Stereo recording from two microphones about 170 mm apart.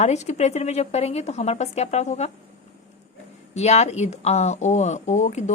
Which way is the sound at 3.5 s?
40° left (ahead or behind).